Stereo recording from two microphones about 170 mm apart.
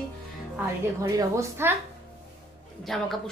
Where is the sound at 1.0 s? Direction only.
15° right (ahead or behind).